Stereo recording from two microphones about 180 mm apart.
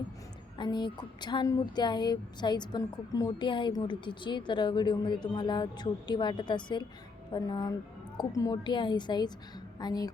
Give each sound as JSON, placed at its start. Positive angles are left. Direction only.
{"t": 0.5, "sound": "a woman's voice", "side_deg": 25}